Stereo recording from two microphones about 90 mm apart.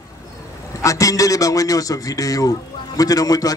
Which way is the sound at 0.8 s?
40° left (ahead or behind).